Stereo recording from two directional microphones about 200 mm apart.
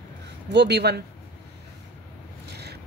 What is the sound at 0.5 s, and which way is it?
Speech, 55° right (ahead or behind).